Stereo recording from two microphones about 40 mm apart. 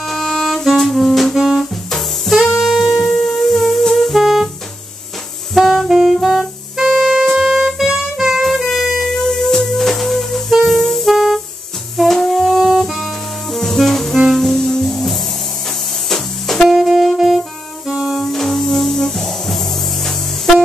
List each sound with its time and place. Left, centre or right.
0.0 s music: centre
5.5 s saxophone: centre
5.9 s saxophone: centre
6.2 s music: centre
8.6 s a sound: centre
9.1 s music: centre
16.6 s saxophone: centre
17.8 s saxophone: centre
18.1 s music: centre